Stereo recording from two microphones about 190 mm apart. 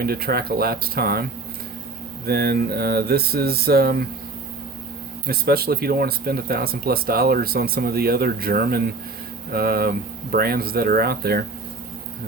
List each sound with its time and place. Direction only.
0.0 s speech: 50° right (ahead or behind)
2.2 s a sound: 55° right (ahead or behind)
5.2 s speech: 55° right (ahead or behind)